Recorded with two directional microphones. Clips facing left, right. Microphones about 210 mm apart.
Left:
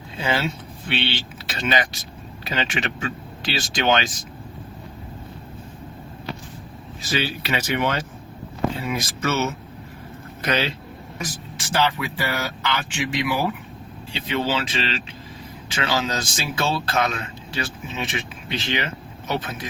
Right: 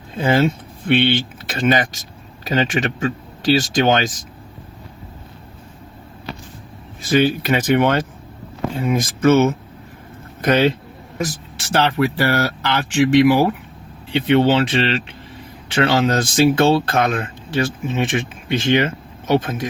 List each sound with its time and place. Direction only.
0.2 s speech: 50° right (ahead or behind)
7.0 s speech: 50° right (ahead or behind)
11.2 s speech: 70° right (ahead or behind)
14.1 s speech: 60° right (ahead or behind)